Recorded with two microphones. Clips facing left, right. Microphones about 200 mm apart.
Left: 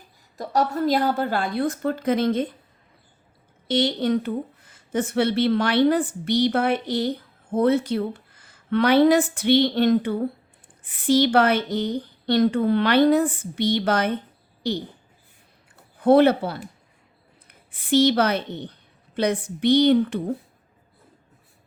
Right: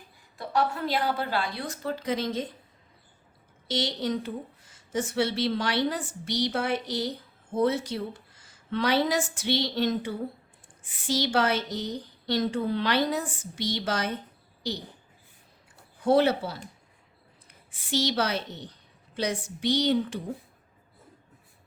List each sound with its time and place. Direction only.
0.3 s a woman's voice: 40° left (ahead or behind); by 2.5 s 55° left (ahead or behind)
3.7 s a woman's voice: 60° left (ahead or behind)
16.0 s speech: 60° left (ahead or behind)
17.7 s a woman's voice: 55° left (ahead or behind)